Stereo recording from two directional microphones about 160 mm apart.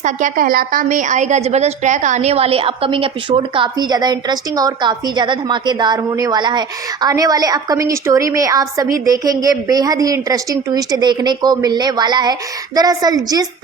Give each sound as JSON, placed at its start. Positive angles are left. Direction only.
{"t": 0.0, "sound": "a woman's voice", "side_deg": -55}